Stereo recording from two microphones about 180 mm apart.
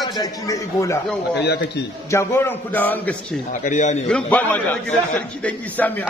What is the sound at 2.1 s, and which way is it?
A man's voice, 15° left (ahead or behind).